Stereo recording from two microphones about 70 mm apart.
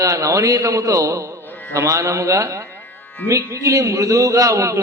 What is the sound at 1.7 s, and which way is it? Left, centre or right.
A man's voice, right.